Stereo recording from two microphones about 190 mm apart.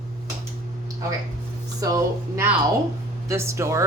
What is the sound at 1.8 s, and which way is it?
Speech, 15° right (ahead or behind).